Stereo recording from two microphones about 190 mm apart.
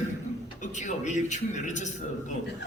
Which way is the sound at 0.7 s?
40° left (ahead or behind).